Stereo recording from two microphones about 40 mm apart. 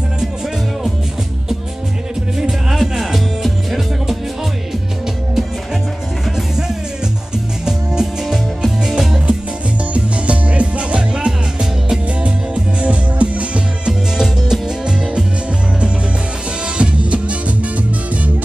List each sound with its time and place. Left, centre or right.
2.3 s music: centre
7.6 s music: centre
9.9 s music: right
14.1 s music: centre
16.7 s music: right